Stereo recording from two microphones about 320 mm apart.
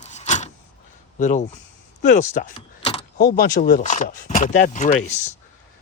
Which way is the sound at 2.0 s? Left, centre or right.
Left.